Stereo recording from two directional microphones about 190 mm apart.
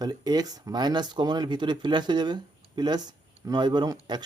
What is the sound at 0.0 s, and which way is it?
Speech, 20° right (ahead or behind).